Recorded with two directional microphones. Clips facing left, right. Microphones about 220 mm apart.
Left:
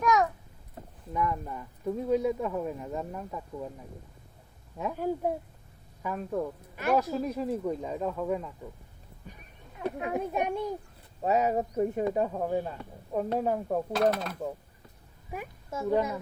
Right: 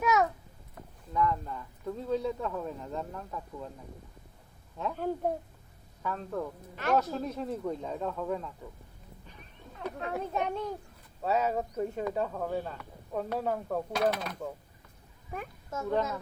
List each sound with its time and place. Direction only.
0.0 s a sound: 5° right (ahead or behind)
0.8 s a sound: 25° left (ahead or behind)
1.1 s speech: 15° left (ahead or behind)
4.8 s speech: 10° left (ahead or behind)
10.0 s speech: 15° left (ahead or behind)
13.9 s speech: centre (ahead or behind)